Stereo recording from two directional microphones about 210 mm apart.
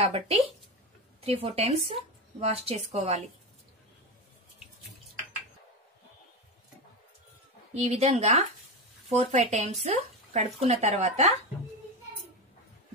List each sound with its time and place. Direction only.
0.0 s a woman's voice: 25° right (ahead or behind)
7.7 s a woman's voice: 30° right (ahead or behind)